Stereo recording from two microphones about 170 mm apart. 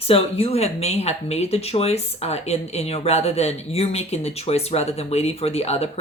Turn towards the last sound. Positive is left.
turn(degrees=35)  # may be behind; listen again after turning